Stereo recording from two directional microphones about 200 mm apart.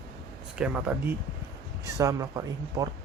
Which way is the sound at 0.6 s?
5° right (ahead or behind).